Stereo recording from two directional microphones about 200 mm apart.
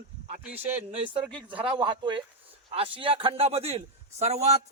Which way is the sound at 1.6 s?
25° right (ahead or behind).